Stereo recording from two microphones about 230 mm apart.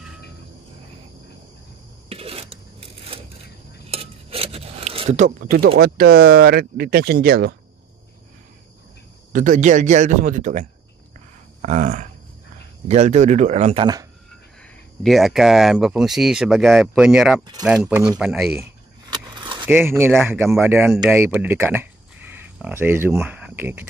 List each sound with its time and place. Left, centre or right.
2.0 s a sound: right
5.8 s speech: right
9.3 s speech: right
15.0 s speech: centre
18.6 s a sound: centre
19.7 s speech: centre